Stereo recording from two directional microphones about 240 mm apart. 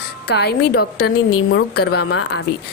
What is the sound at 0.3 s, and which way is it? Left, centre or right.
Speech, left.